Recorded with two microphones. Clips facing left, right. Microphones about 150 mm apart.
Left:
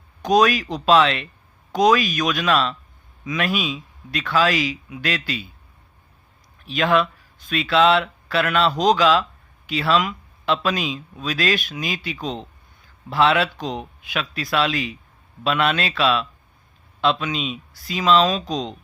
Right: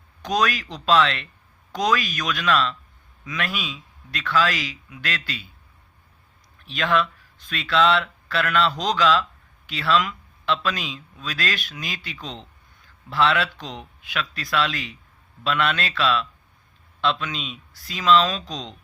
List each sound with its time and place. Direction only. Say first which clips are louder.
0.2 s speech: left 6 dB; 15° left (ahead or behind)
6.7 s speech: left 4 dB; 10° left (ahead or behind)